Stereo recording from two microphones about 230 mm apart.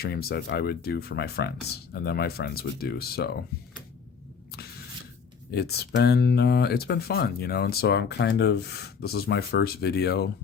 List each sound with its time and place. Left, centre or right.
0.0 s speech: left
5.5 s speech: left